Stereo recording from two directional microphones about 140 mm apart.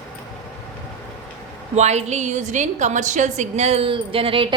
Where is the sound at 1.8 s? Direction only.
50° right (ahead or behind).